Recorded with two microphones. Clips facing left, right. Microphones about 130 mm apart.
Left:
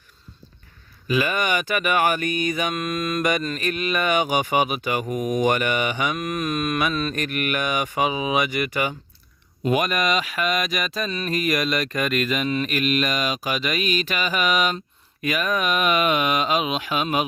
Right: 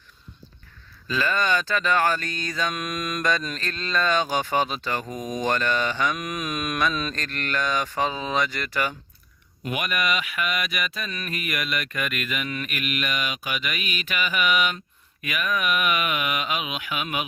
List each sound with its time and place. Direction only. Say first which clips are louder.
1.0 s speech: left 2 dB; 15° left (ahead or behind)
9.6 s speech: left 5 dB; 35° left (ahead or behind)